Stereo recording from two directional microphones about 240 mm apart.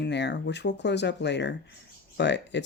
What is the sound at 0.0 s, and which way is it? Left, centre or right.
Speech, left.